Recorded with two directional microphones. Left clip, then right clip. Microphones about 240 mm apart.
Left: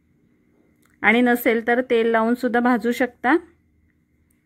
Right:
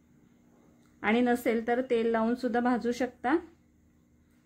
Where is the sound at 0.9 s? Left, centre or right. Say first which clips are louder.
Left 10 dB; left.